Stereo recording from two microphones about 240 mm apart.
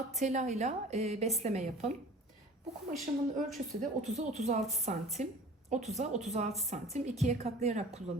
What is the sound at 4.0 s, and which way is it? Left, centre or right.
A woman's voice, right.